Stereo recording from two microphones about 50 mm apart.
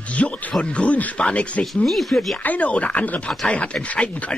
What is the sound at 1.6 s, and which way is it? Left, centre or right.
Speech, centre.